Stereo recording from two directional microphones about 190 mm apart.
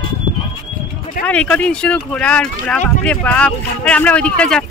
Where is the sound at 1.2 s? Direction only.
5° left (ahead or behind).